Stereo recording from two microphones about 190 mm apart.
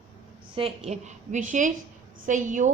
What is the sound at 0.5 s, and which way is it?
A woman's voice, 30° right (ahead or behind).